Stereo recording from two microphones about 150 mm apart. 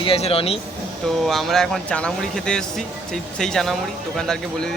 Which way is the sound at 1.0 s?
Centre (ahead or behind).